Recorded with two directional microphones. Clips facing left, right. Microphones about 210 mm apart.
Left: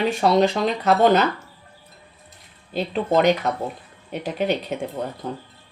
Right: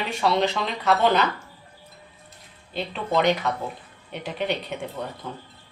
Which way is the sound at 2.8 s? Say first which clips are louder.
Left 5 dB; 40° left (ahead or behind).